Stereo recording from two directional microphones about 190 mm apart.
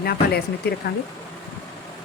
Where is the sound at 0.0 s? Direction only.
55° left (ahead or behind).